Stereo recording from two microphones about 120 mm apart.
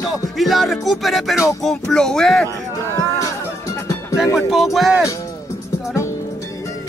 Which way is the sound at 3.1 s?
25° left (ahead or behind).